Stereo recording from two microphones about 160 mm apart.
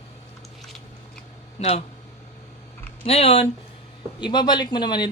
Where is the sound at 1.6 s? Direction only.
40° left (ahead or behind).